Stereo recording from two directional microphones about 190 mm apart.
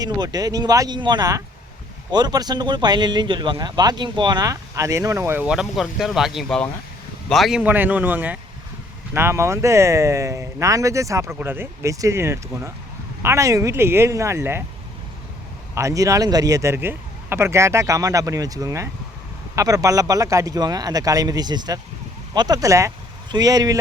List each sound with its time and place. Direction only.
0.0 s speech: 20° right (ahead or behind)
15.7 s speech: 15° right (ahead or behind)